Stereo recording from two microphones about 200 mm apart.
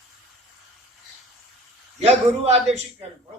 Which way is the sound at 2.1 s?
35° right (ahead or behind).